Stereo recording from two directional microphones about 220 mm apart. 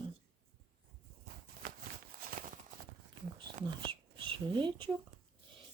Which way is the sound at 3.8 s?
25° right (ahead or behind).